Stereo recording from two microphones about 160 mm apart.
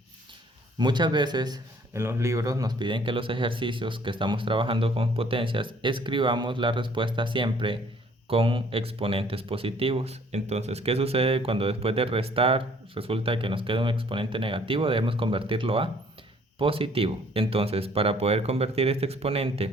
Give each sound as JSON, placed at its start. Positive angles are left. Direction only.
{"t": 0.8, "sound": "speech", "side_deg": -30}